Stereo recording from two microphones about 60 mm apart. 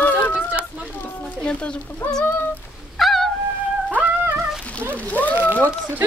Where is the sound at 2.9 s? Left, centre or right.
Centre.